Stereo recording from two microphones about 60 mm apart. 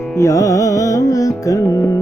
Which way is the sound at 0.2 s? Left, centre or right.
Left.